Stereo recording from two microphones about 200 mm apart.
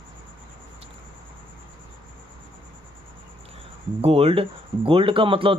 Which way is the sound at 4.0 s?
30° right (ahead or behind).